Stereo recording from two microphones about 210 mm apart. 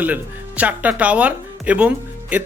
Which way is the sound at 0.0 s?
5° right (ahead or behind).